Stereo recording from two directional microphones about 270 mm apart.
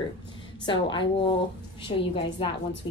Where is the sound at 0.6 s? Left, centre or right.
Centre.